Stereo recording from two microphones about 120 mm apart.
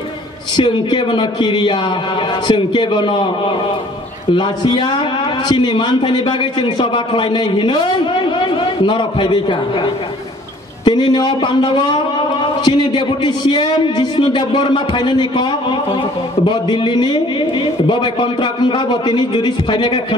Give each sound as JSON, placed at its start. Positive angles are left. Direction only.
{"t": 0.6, "sound": "a man's voice", "side_deg": 40}
{"t": 4.4, "sound": "a man's voice", "side_deg": 40}
{"t": 10.9, "sound": "a man's voice", "side_deg": 40}